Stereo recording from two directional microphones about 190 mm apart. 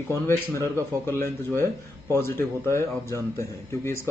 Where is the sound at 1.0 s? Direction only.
10° left (ahead or behind).